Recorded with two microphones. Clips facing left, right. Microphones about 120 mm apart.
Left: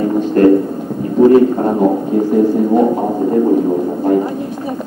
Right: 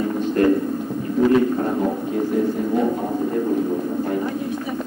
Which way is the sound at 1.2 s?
35° left (ahead or behind).